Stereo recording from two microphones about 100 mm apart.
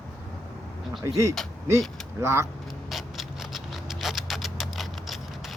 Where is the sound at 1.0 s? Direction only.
30° right (ahead or behind).